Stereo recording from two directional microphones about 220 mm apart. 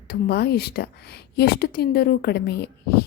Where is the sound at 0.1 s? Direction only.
45° left (ahead or behind).